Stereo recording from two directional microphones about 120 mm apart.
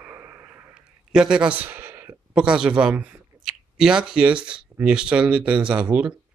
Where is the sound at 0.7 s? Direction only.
5° right (ahead or behind).